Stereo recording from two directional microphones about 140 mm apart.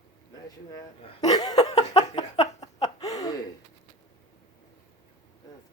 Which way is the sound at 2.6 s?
25° left (ahead or behind).